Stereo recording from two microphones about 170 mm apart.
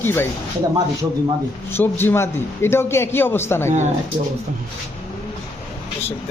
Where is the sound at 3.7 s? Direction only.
40° right (ahead or behind).